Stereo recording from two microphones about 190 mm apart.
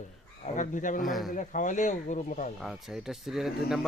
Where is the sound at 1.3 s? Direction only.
40° left (ahead or behind).